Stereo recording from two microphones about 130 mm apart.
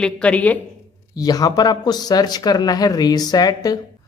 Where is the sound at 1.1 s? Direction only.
30° left (ahead or behind).